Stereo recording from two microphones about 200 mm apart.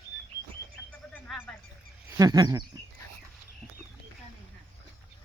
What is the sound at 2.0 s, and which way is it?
Speech, 15° right (ahead or behind).